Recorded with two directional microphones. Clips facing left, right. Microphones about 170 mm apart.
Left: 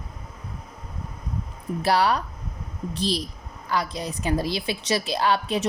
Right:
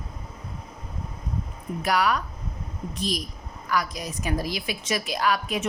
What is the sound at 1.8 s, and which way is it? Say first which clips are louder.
A woman's voice: left 2 dB; 30° left (ahead or behind).